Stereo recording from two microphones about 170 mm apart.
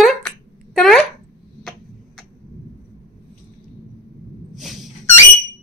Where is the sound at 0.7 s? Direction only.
5° left (ahead or behind).